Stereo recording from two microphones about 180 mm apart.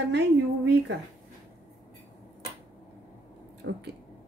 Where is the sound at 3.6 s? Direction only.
85° right.